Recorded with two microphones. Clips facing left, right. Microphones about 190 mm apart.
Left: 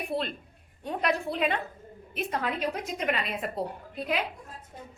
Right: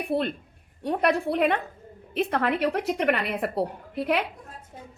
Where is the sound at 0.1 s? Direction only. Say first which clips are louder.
Right 8 dB; 55° right (ahead or behind).